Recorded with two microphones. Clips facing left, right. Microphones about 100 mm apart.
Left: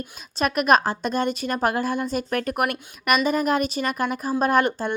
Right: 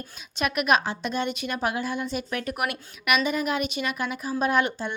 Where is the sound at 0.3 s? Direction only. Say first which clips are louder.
Left 4 dB; 40° left (ahead or behind).